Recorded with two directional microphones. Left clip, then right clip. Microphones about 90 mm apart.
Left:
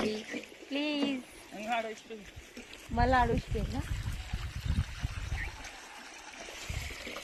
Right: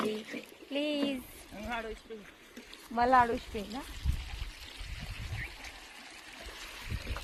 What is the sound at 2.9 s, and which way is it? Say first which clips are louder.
Speech: right 2 dB; 25° right (ahead or behind).